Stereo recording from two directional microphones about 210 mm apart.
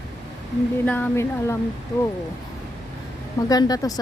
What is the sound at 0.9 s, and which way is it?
Speech, 10° left (ahead or behind).